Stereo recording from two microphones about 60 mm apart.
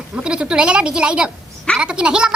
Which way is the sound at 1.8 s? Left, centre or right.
Centre.